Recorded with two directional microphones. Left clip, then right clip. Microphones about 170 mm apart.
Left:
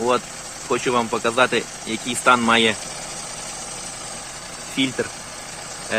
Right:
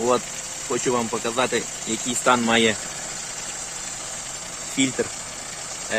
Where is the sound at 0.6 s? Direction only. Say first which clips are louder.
Left 3 dB; centre (ahead or behind).